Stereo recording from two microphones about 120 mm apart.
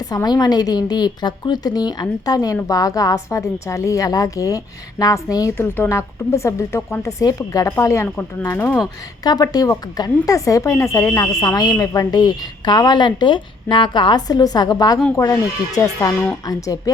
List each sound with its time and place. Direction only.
0.1 s a woman's voice: 30° left (ahead or behind)
5.5 s a woman's voice: 20° left (ahead or behind)
8.0 s speech: 10° left (ahead or behind)
9.2 s a woman's voice: 35° left (ahead or behind)
16.5 s a woman's voice: 30° left (ahead or behind)